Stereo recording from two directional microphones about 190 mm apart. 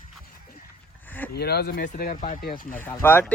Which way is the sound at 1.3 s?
55° left (ahead or behind).